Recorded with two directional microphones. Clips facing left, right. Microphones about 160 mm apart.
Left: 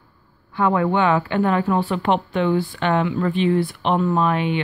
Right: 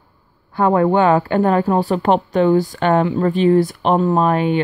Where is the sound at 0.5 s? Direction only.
40° right (ahead or behind).